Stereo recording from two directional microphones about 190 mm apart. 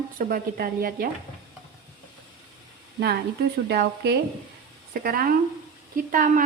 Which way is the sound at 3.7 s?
60° right (ahead or behind).